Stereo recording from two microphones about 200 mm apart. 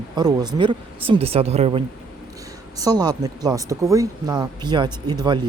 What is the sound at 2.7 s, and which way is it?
Speech, 20° right (ahead or behind).